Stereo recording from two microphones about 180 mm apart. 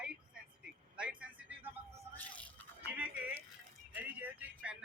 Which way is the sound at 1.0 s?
5° right (ahead or behind).